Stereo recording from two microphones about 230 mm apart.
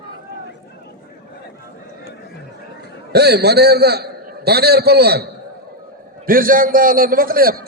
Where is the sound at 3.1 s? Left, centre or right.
Right.